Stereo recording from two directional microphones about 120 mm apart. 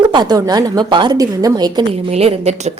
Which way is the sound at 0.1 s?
35° right (ahead or behind).